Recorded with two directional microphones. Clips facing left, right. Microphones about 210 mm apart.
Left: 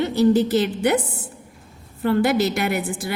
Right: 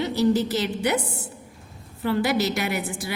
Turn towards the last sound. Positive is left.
turn(degrees=55)  # may be behind; listen again after turning